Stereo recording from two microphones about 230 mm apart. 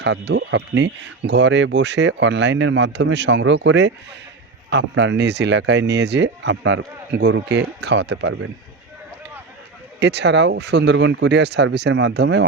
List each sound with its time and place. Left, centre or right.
0.0 s speech: right
10.0 s speech: right